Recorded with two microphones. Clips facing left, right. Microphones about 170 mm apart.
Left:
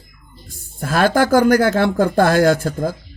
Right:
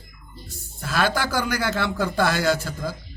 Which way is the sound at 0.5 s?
50° left (ahead or behind).